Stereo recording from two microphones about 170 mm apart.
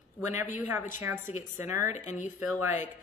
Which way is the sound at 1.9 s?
45° left (ahead or behind).